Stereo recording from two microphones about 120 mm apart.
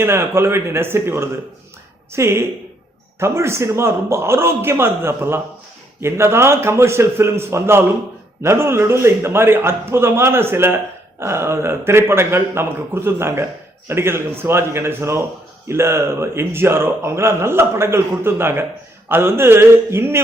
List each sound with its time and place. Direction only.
0.0 s a man's voice: 20° right (ahead or behind)